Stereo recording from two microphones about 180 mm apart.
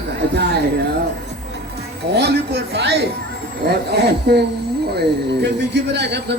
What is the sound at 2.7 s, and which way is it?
Speech, 65° right (ahead or behind).